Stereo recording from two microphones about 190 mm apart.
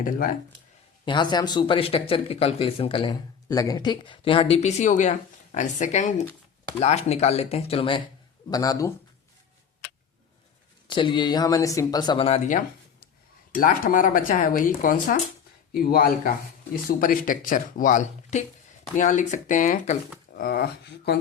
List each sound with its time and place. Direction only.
0.0 s speech: 45° left (ahead or behind)
1.0 s speech: 25° left (ahead or behind)
10.8 s speech: 25° left (ahead or behind)
20.3 s speech: 50° left (ahead or behind)